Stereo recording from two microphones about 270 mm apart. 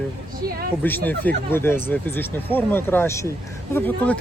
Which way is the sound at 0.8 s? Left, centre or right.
Centre.